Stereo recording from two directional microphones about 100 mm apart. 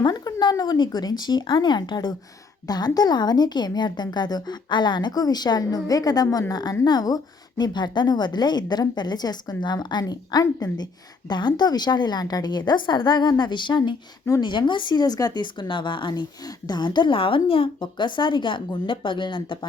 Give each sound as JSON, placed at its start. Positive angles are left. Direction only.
{"t": 0.0, "sound": "a woman's voice", "side_deg": 45}